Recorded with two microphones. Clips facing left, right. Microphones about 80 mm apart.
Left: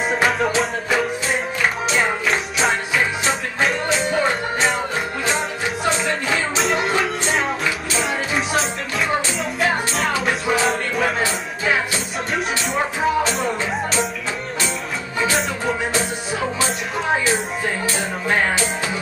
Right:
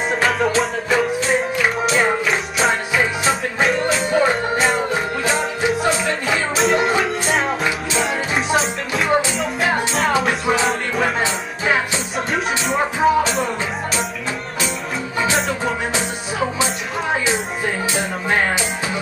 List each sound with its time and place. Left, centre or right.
0.1 s music: centre
3.3 s music: centre
6.2 s music: centre
8.0 s music: centre
12.6 s music: centre
15.9 s music: centre